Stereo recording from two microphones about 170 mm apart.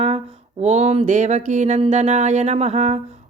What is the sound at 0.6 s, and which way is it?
Speech, 40° right (ahead or behind).